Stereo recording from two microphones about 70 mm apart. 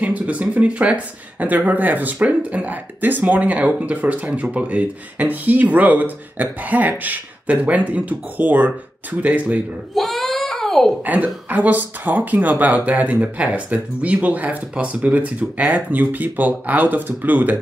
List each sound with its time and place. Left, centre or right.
0.0 s speech: centre
9.9 s a sound: centre
11.1 s speech: right